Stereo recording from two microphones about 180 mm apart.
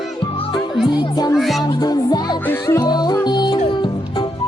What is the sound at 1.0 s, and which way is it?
Music, 20° left (ahead or behind).